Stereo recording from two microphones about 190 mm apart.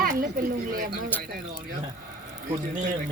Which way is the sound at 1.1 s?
10° left (ahead or behind).